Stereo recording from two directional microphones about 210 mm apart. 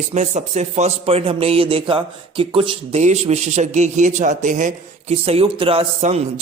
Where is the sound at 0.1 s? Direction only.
35° right (ahead or behind).